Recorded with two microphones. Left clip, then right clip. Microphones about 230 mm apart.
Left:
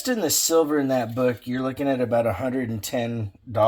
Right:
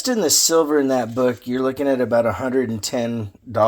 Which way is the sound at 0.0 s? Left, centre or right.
Right.